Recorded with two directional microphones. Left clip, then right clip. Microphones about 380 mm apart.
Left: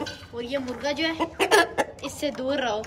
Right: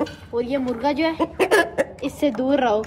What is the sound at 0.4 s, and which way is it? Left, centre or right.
Speech, centre.